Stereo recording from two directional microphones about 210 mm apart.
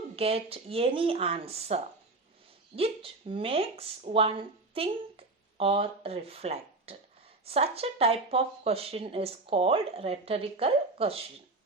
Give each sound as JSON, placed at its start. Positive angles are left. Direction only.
{"t": 0.2, "sound": "speech", "side_deg": -30}